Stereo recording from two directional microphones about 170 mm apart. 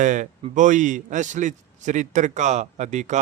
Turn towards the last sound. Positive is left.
turn(degrees=-45)  # may be behind; listen again after turning